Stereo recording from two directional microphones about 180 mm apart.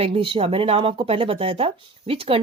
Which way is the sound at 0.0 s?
30° right (ahead or behind).